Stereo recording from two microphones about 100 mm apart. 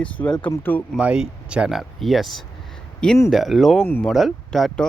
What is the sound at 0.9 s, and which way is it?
Speech, 10° right (ahead or behind).